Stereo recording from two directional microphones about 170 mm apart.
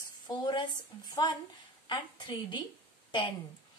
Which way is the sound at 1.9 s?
25° left (ahead or behind).